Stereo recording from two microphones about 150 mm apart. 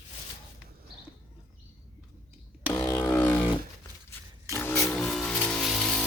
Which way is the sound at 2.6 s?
15° left (ahead or behind).